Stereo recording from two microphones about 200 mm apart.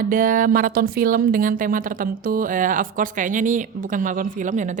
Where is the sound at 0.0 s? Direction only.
45° right (ahead or behind).